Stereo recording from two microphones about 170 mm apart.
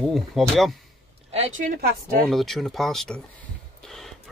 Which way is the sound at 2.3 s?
Centre (ahead or behind).